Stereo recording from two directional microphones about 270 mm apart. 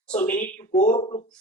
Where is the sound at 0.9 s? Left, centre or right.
Centre.